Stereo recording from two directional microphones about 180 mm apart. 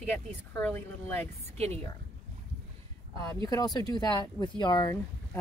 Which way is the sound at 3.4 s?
20° left (ahead or behind).